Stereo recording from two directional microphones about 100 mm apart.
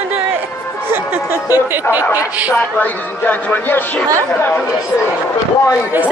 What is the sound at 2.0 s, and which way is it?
Speech, 30° left (ahead or behind).